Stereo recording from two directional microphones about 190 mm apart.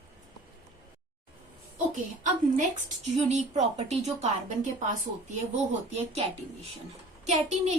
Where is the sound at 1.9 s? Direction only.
40° right (ahead or behind).